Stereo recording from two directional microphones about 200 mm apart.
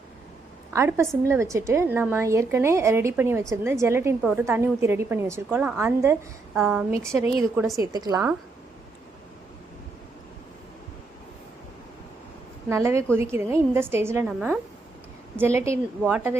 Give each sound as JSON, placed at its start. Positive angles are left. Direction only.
{"t": 0.7, "sound": "a woman's voice", "side_deg": -15}
{"t": 7.8, "sound": "a woman's voice", "side_deg": -20}
{"t": 12.6, "sound": "a woman's voice", "side_deg": -15}